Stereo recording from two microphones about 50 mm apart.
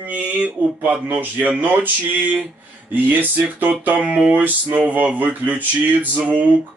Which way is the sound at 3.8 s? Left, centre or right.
Right.